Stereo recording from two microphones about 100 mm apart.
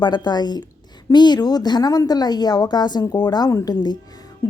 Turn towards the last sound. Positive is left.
turn(degrees=40)  # may be behind; listen again after turning